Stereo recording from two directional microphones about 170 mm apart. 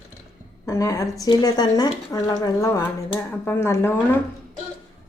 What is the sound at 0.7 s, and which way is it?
Speech, 20° left (ahead or behind).